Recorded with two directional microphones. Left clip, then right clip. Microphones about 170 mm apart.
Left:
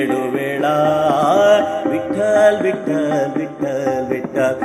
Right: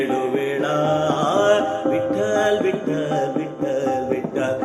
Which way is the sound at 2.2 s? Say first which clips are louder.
Left 10 dB; 30° left (ahead or behind).